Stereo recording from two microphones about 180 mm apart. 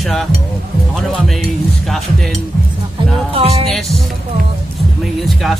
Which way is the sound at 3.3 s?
35° right (ahead or behind).